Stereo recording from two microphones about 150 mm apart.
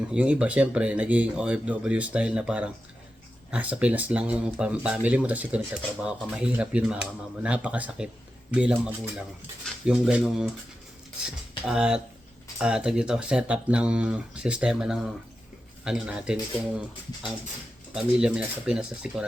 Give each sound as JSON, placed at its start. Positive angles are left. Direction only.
{"t": 0.1, "sound": "speech", "side_deg": -5}
{"t": 11.6, "sound": "speech", "side_deg": -5}
{"t": 17.9, "sound": "speech", "side_deg": -5}